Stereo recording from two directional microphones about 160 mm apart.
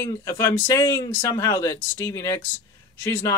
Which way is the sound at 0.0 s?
20° left (ahead or behind).